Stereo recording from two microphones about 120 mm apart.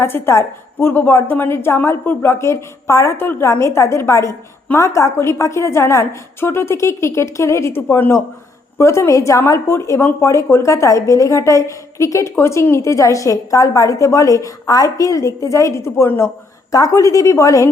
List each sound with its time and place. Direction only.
0.0 s a woman's voice: 20° left (ahead or behind)